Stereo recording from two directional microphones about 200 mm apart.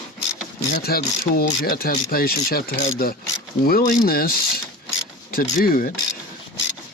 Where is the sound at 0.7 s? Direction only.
50° left (ahead or behind).